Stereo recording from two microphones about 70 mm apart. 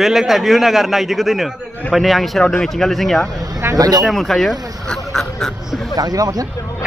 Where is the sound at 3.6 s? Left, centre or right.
Right.